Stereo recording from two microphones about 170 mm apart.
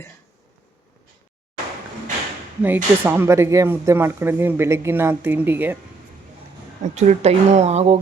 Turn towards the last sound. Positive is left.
turn(degrees=-40)  # may be behind; listen again after turning